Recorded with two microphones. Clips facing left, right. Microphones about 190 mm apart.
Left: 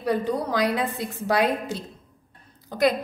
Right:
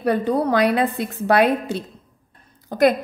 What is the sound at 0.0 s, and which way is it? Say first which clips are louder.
A woman's voice: right 5 dB; 65° right (ahead or behind).